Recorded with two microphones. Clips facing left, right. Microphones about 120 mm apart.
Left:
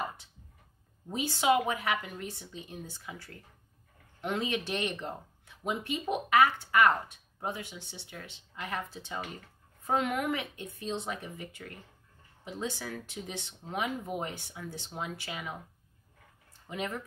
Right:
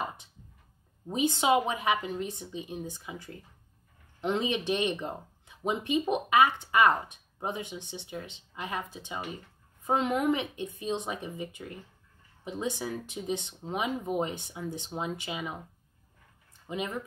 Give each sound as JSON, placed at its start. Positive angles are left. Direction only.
{"t": 1.1, "sound": "speech", "side_deg": -20}
{"t": 16.6, "sound": "speech", "side_deg": -15}